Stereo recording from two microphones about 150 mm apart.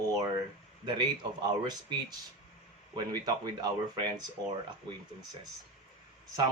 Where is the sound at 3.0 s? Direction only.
25° right (ahead or behind).